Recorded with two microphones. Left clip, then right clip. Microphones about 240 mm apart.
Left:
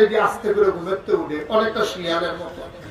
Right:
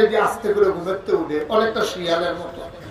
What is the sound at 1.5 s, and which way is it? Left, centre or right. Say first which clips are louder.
Speech: left 1 dB; right.